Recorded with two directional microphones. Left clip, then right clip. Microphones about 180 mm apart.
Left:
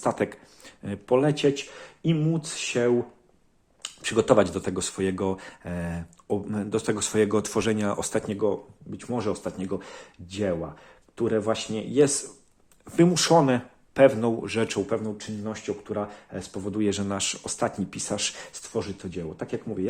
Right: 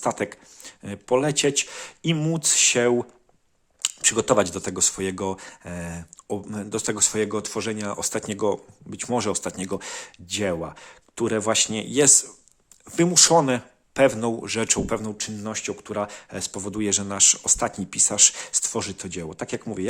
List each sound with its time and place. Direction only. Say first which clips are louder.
0.0 s speech: even; 25° right (ahead or behind); by 2.9 s 50° right (ahead or behind)
4.1 s speech: left 2 dB; 25° right (ahead or behind)
8.4 s speech: right 2 dB; 50° right (ahead or behind)
13.0 s speech: right 2 dB; 25° right (ahead or behind)
14.8 s speech: right 1 dB; 55° right (ahead or behind); by 18.6 s 35° right (ahead or behind)
18.6 s speech: right 3 dB; 50° right (ahead or behind)